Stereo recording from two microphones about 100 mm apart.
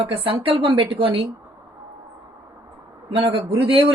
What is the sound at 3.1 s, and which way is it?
Speech, 70° right (ahead or behind).